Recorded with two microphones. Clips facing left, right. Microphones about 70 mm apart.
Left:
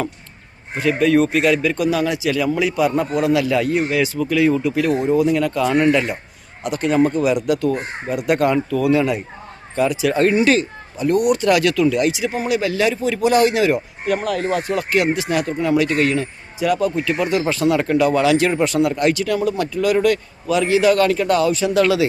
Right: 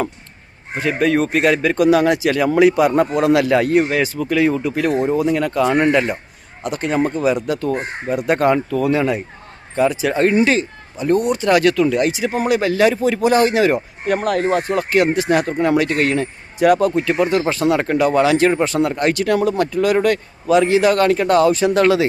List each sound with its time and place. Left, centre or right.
0.8 s speech: right
16.6 s speech: right
17.1 s speech: right